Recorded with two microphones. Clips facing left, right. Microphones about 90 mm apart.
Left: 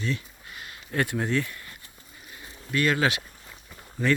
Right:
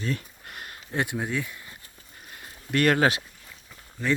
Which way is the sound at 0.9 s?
15° right (ahead or behind).